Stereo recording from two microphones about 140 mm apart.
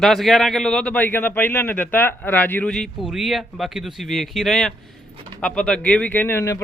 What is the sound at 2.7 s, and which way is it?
Speech, centre (ahead or behind).